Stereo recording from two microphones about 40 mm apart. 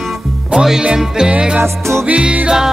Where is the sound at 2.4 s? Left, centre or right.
Centre.